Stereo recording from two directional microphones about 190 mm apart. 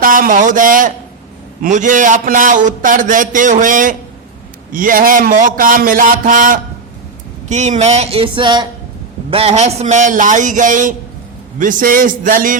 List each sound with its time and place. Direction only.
0.0 s a man's voice: 45° right (ahead or behind)